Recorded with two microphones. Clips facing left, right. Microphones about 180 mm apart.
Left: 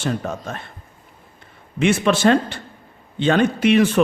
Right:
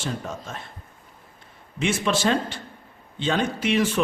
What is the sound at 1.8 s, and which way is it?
A man's voice, 60° left (ahead or behind).